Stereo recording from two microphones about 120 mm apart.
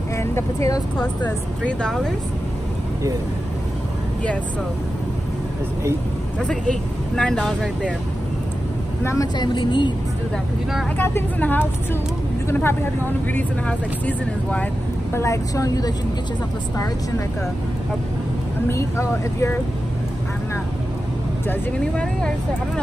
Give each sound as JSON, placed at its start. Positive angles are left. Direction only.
{"t": 0.2, "sound": "speech", "side_deg": 20}
{"t": 1.0, "sound": "speech", "side_deg": 10}
{"t": 6.4, "sound": "speech", "side_deg": 5}
{"t": 9.0, "sound": "speech", "side_deg": 25}
{"t": 9.4, "sound": "a woman's voice", "side_deg": 40}
{"t": 11.0, "sound": "speech", "side_deg": 15}
{"t": 15.1, "sound": "speech", "side_deg": 25}
{"t": 18.7, "sound": "speech", "side_deg": 20}
{"t": 21.5, "sound": "speech", "side_deg": 10}